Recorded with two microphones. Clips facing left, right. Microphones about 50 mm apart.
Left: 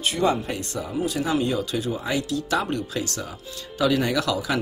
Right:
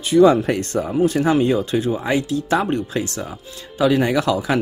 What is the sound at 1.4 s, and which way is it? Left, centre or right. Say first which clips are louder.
Speech: right 7 dB; right.